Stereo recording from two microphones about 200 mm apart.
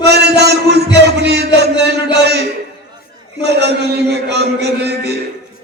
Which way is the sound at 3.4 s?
55° right (ahead or behind).